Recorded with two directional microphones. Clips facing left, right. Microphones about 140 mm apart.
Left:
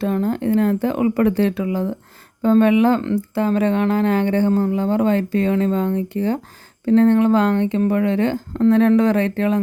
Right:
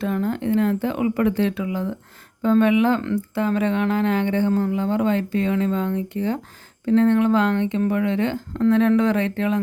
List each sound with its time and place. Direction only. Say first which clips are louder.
0.0 s speech: left 3 dB; 35° left (ahead or behind)